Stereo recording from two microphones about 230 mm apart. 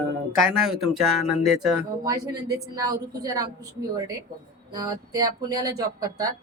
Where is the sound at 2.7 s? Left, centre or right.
Centre.